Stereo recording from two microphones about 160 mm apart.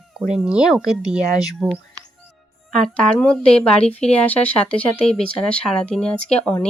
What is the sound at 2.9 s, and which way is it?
Speech, 5° left (ahead or behind).